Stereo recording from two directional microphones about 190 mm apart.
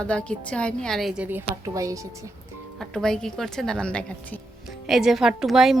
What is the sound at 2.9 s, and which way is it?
A woman's voice, 5° left (ahead or behind).